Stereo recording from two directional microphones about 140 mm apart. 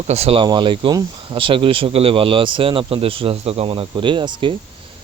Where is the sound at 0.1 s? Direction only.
45° right (ahead or behind).